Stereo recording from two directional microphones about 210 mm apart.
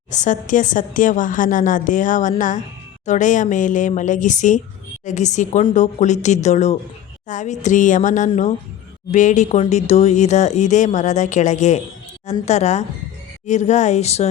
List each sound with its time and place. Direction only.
0.1 s speech: 35° left (ahead or behind)